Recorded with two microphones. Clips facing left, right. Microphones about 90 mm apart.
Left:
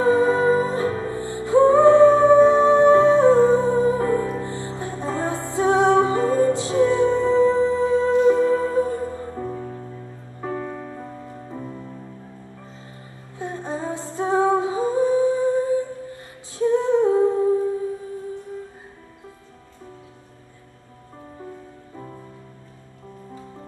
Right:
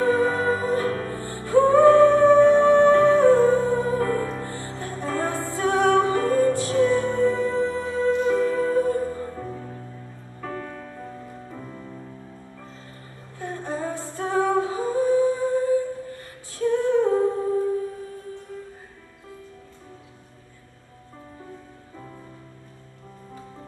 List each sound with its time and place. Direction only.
0.0 s music: 20° left (ahead or behind)
13.4 s humming: 20° left (ahead or behind)